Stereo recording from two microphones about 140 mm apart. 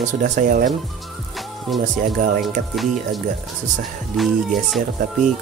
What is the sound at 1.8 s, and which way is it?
Speech, 70° right (ahead or behind).